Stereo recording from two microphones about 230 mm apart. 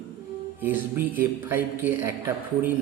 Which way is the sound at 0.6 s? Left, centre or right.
Centre.